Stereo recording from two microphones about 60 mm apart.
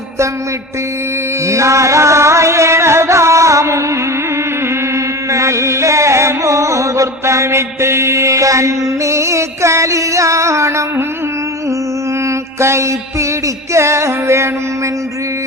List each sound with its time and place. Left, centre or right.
1.5 s music: right
5.3 s music: right
12.5 s mantra: right
13.7 s music: right